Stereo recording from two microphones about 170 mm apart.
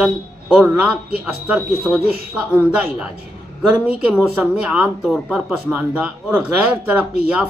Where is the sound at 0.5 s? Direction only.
5° right (ahead or behind).